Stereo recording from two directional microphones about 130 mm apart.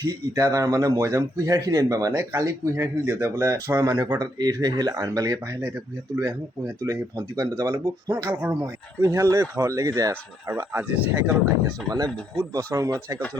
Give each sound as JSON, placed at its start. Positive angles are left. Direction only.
{"t": 0.0, "sound": "a man's voice", "side_deg": -25}
{"t": 6.8, "sound": "a man's voice", "side_deg": -25}
{"t": 11.9, "sound": "a man's voice", "side_deg": -30}